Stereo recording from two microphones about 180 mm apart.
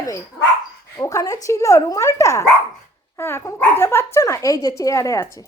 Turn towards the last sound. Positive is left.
turn(degrees=15)  # may be behind; listen again after turning